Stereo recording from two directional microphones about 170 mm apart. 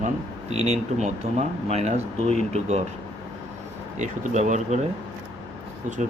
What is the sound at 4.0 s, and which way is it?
Speech, 45° right (ahead or behind).